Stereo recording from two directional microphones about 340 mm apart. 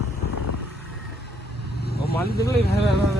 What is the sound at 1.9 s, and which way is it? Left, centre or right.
Vehicle, left.